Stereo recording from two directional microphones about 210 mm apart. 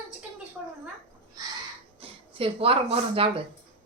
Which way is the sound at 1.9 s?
25° right (ahead or behind).